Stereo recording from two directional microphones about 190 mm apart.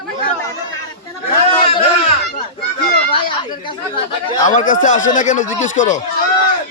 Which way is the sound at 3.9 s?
25° left (ahead or behind).